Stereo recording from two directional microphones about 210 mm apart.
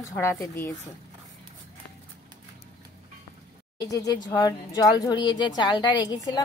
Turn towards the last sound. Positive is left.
turn(degrees=20)  # may be behind; listen again after turning